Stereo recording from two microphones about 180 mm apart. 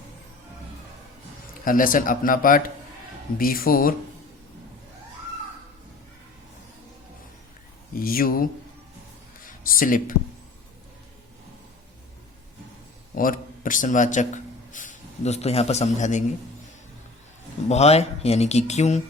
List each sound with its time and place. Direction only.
1.6 s speech: 50° left (ahead or behind)
7.9 s speech: 55° left (ahead or behind)
9.4 s a sound: 50° left (ahead or behind)
13.1 s a man's voice: 50° left (ahead or behind)
17.7 s speech: 35° left (ahead or behind)